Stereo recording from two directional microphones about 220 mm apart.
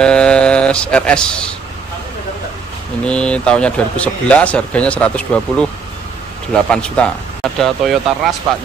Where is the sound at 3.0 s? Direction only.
5° left (ahead or behind).